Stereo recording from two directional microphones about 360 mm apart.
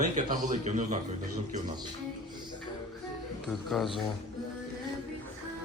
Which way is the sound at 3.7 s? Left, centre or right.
Centre.